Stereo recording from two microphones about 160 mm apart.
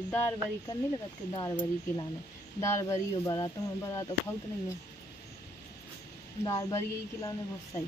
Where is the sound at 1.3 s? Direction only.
25° left (ahead or behind).